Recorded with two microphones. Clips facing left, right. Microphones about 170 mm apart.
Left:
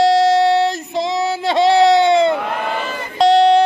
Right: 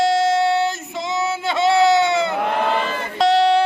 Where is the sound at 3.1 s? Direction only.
30° left (ahead or behind).